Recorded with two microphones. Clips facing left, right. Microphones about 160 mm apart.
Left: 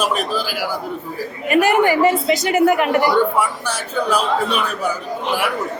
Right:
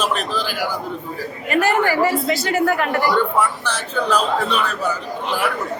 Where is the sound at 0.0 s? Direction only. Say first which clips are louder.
Left 2 dB; 10° left (ahead or behind).